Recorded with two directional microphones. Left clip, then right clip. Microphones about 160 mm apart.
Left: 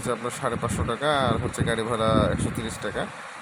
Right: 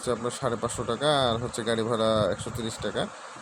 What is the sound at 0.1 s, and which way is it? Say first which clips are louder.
Speech: left 1 dB; 20° right (ahead or behind).